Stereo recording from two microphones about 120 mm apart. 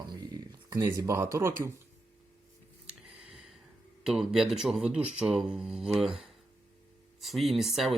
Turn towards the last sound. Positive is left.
turn(degrees=0)  # may be behind; listen again after turning